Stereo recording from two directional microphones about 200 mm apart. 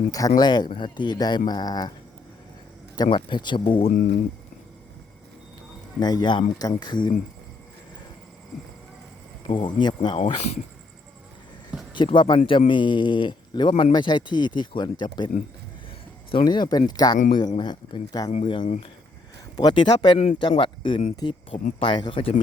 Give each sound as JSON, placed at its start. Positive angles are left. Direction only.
{"t": 0.1, "sound": "speech", "side_deg": 20}
{"t": 2.9, "sound": "speech", "side_deg": 20}
{"t": 6.0, "sound": "speech", "side_deg": 20}
{"t": 8.5, "sound": "clip-clop", "side_deg": 0}
{"t": 9.5, "sound": "speech", "side_deg": 25}
{"t": 11.9, "sound": "speech", "side_deg": 25}
{"t": 16.3, "sound": "speech", "side_deg": 20}